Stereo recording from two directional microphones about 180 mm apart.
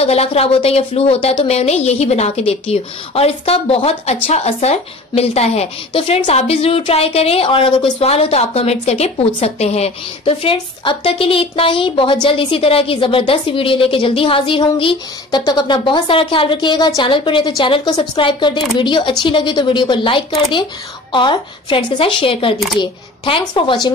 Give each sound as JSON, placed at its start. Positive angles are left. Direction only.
{"t": 0.0, "sound": "a woman's voice", "side_deg": 35}